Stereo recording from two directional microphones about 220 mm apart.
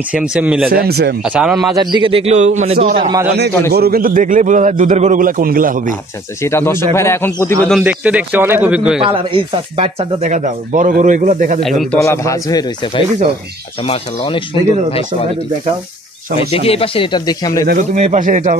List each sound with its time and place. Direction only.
0.1 s speech: 5° right (ahead or behind)
0.7 s speech: 45° right (ahead or behind)
1.3 s speech: 5° right (ahead or behind)
2.0 s a man's voice: 30° right (ahead or behind)
3.7 s speech: 45° right (ahead or behind)
6.4 s speech: 10° left (ahead or behind)
7.8 s speech: 5° right (ahead or behind)
9.1 s speech: 25° right (ahead or behind)
11.9 s speech: 10° left (ahead or behind)
16.3 s speech: 25° left (ahead or behind)
17.9 s speech: 35° right (ahead or behind)